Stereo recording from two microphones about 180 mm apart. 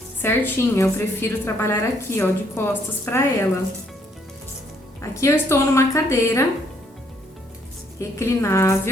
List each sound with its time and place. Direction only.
0.2 s a woman's voice: 10° left (ahead or behind)
4.9 s a woman's voice: 15° left (ahead or behind)
7.9 s a woman's voice: 15° left (ahead or behind)